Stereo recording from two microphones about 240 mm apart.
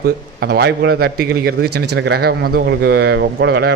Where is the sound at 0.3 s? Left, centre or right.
Right.